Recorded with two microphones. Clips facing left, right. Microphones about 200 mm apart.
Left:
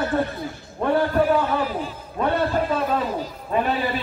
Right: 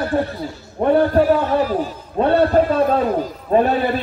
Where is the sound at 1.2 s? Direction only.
40° right (ahead or behind).